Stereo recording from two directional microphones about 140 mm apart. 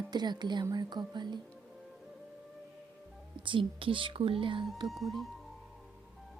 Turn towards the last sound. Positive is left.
turn(degrees=0)  # may be behind; listen again after turning